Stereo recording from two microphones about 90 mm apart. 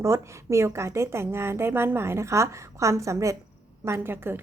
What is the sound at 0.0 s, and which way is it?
A woman's voice, 30° right (ahead or behind).